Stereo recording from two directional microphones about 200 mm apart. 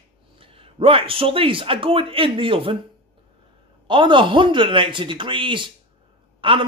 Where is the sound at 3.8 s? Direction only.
25° right (ahead or behind).